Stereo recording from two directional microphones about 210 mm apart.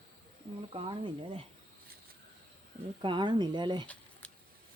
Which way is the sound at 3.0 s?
20° right (ahead or behind).